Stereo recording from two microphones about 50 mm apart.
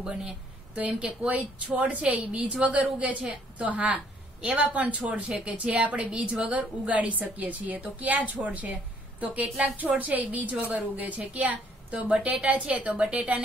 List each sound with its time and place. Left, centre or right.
0.7 s a woman's voice: right